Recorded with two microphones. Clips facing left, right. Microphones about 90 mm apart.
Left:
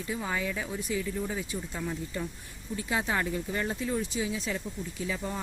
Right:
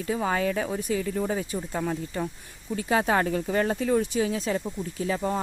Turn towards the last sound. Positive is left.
turn(degrees=-45)  # may be behind; listen again after turning